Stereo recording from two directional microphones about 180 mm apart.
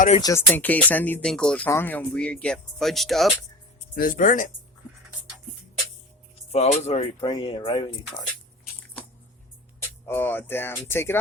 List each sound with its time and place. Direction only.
0.2 s speech: 15° left (ahead or behind); by 3.3 s centre (ahead or behind)
3.9 s speech: 50° left (ahead or behind)
6.5 s speech: 35° left (ahead or behind)
7.2 s speech: 25° left (ahead or behind)
10.1 s speech: 10° left (ahead or behind)